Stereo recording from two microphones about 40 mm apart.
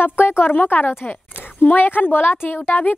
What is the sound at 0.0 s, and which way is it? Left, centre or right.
A woman's voice, left.